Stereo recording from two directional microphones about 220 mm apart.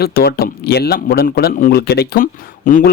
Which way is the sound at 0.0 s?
45° left (ahead or behind).